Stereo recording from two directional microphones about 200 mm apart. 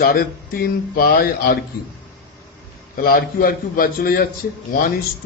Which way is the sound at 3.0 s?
45° left (ahead or behind).